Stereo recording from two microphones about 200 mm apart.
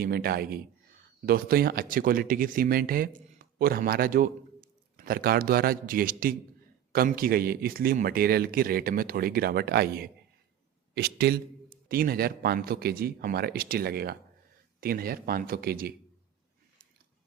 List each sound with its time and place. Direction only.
0.0 s a man's voice: 50° right (ahead or behind)